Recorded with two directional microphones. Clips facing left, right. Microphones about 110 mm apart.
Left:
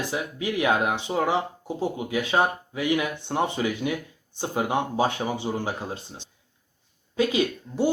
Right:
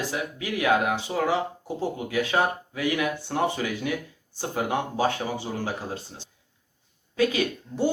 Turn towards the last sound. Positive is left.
turn(degrees=20)  # may be behind; listen again after turning